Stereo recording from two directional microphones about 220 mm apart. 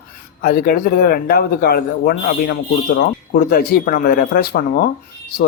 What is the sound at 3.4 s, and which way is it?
Speech, 40° left (ahead or behind).